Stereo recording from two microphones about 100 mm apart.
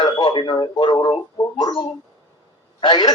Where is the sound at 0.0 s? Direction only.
50° left (ahead or behind).